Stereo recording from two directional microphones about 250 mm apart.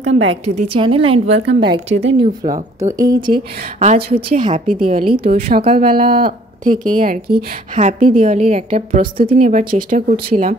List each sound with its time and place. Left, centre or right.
0.0 s a woman's voice: right
0.6 s a woman's voice: right
1.4 s a woman's voice: right
2.1 s a woman's voice: right
3.0 s a woman's voice: centre; by 10.5 s right